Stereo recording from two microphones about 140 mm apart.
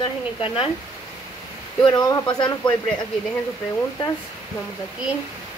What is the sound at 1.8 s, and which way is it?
Speech, 30° left (ahead or behind).